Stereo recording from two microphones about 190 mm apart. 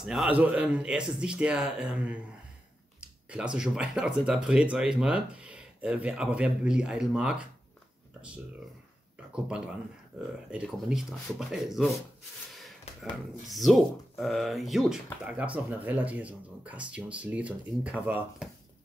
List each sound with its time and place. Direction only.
0.0 s speech: centre (ahead or behind)
10.5 s speech: 5° right (ahead or behind)
12.9 s a sound: 35° left (ahead or behind)
13.4 s speech: centre (ahead or behind)